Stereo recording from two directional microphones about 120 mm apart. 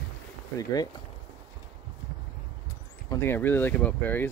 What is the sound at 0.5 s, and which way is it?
Speech, 35° left (ahead or behind).